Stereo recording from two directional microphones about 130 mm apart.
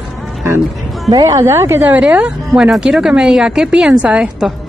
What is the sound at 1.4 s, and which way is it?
Speech, 20° right (ahead or behind).